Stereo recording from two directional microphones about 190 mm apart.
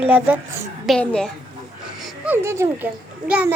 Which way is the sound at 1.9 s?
5° right (ahead or behind).